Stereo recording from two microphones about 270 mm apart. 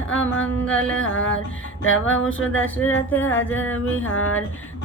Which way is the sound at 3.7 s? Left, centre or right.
Left.